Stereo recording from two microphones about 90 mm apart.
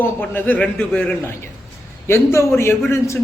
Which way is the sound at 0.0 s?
20° left (ahead or behind).